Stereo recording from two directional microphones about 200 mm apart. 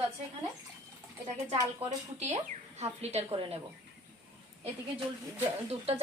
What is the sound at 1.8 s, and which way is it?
Speech, 30° right (ahead or behind).